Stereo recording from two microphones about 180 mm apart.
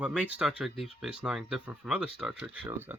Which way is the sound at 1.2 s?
5° right (ahead or behind).